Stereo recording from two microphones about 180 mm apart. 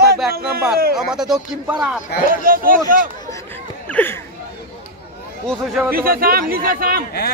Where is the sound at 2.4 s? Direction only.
50° right (ahead or behind).